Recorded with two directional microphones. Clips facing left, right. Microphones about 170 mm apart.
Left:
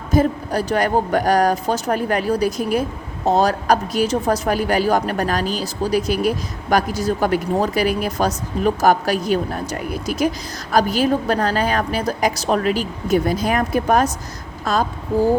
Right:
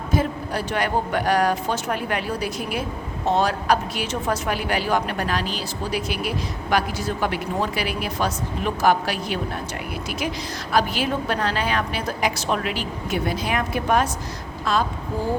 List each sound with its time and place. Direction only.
0.1 s speech: 40° left (ahead or behind)